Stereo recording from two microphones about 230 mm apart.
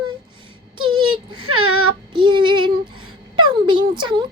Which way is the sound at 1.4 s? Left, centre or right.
Right.